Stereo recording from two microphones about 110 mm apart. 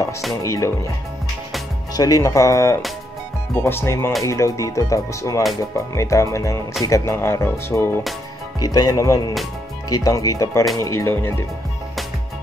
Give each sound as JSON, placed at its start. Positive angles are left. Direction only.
{"t": 0.3, "sound": "speech", "side_deg": 30}
{"t": 2.0, "sound": "speech", "side_deg": 30}
{"t": 8.5, "sound": "speech", "side_deg": 35}